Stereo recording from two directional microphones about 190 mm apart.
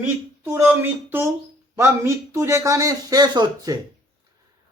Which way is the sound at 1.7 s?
15° right (ahead or behind).